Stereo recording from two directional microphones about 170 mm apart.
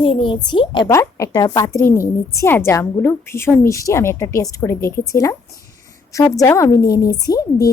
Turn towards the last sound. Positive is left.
turn(degrees=20)  # may be behind; listen again after turning